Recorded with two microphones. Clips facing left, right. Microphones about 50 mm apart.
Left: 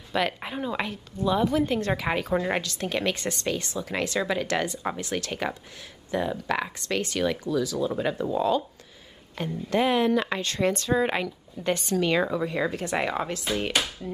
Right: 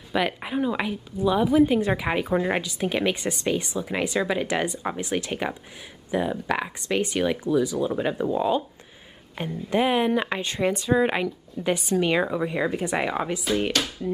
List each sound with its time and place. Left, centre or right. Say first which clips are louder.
0.1 s a woman's voice: right 2 dB; centre